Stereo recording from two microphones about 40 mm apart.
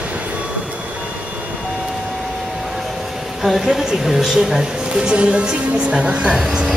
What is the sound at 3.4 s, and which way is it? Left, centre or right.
A woman's voice, centre.